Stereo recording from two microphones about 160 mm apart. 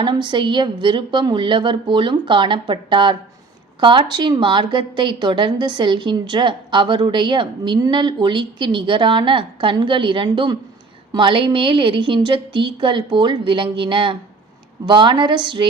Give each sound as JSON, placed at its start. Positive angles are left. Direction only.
{"t": 0.0, "sound": "a woman's voice", "side_deg": -30}